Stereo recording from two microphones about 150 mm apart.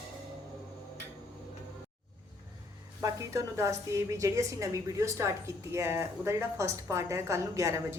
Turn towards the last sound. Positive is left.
turn(degrees=-20)  # may be behind; listen again after turning